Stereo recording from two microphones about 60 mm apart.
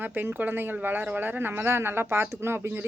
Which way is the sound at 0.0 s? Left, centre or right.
Right.